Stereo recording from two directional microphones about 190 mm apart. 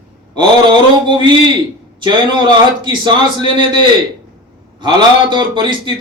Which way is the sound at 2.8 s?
25° right (ahead or behind).